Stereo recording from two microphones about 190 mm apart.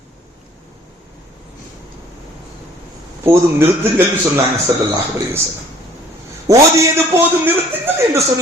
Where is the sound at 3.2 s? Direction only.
15° right (ahead or behind).